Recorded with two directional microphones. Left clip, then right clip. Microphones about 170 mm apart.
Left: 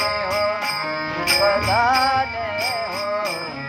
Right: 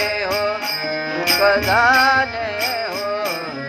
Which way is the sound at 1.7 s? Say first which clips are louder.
Right 3 dB; 20° right (ahead or behind).